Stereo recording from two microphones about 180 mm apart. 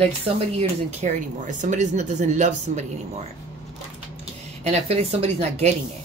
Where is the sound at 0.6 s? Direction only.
45° right (ahead or behind).